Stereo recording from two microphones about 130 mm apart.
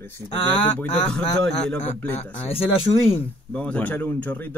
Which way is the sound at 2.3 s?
50° left (ahead or behind).